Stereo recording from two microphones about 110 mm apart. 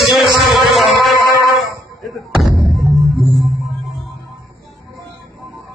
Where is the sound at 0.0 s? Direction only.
Centre (ahead or behind).